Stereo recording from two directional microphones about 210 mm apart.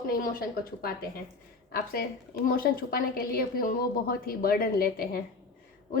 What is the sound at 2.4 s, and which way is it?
A woman's voice, 45° left (ahead or behind).